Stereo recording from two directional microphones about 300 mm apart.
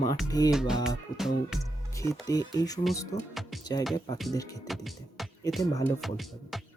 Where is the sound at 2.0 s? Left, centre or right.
Centre.